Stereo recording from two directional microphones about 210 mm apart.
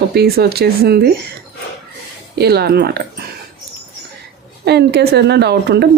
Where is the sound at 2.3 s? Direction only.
50° right (ahead or behind).